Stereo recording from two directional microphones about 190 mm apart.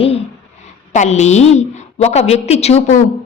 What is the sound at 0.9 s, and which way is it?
A woman's voice, 35° left (ahead or behind).